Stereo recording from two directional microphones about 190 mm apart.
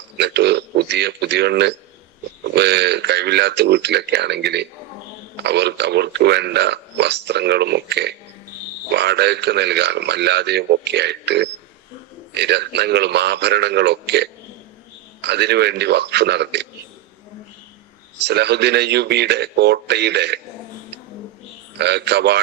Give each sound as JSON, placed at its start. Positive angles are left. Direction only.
{"t": 0.2, "sound": "speech", "side_deg": -60}
{"t": 18.2, "sound": "speech", "side_deg": -65}
{"t": 21.8, "sound": "speech", "side_deg": -60}